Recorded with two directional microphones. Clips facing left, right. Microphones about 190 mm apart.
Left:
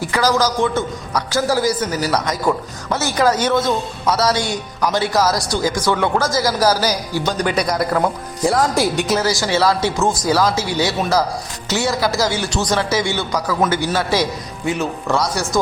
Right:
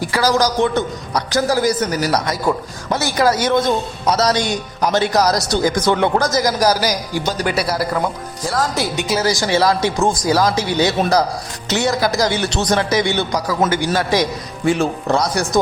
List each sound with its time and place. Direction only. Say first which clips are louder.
0.1 s a man's voice: even; 10° right (ahead or behind)
1.8 s a man's voice: right 1 dB; 40° right (ahead or behind)
2.2 s a man's voice: even; 10° right (ahead or behind)
8.4 s speech: left 4 dB; 15° left (ahead or behind)
9.0 s a man's voice: left 1 dB; centre (ahead or behind)
9.2 s a man's voice: right 4 dB; 15° right (ahead or behind)
14.7 s speech: right 4 dB; 30° right (ahead or behind)